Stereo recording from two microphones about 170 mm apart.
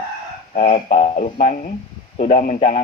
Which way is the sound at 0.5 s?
45° left (ahead or behind).